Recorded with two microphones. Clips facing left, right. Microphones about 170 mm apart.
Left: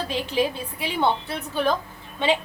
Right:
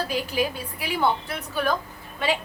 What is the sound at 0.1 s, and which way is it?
Speech, 25° left (ahead or behind).